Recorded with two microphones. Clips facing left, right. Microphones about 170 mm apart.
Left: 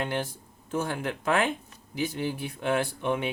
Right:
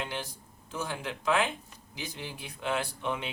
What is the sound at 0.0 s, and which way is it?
Speech, 55° left (ahead or behind).